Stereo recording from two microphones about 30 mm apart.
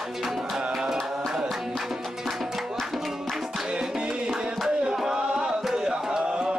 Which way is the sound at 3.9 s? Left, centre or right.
Right.